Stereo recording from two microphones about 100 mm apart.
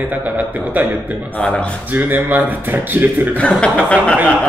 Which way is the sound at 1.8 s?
15° right (ahead or behind).